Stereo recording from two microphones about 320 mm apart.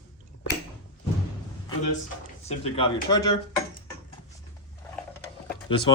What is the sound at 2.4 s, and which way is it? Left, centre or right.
Speech, centre.